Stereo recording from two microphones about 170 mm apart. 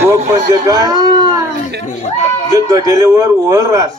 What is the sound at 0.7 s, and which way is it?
Speech, 20° right (ahead or behind).